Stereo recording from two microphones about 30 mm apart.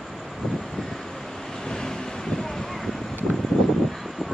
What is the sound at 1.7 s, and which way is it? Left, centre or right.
Vehicle, left.